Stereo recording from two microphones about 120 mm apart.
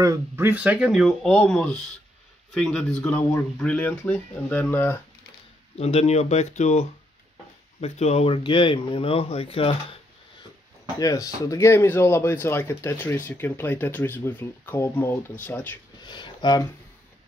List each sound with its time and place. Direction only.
0.4 s speech: 15° right (ahead or behind); by 5.0 s 20° left (ahead or behind)
5.8 s speech: 60° left (ahead or behind); by 6.9 s 75° left (ahead or behind)
7.8 s speech: 60° left (ahead or behind)
11.0 s speech: 30° left (ahead or behind)
16.0 s a sound: 40° left (ahead or behind)